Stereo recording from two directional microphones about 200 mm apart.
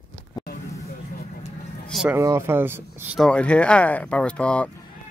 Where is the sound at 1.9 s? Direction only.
Centre (ahead or behind).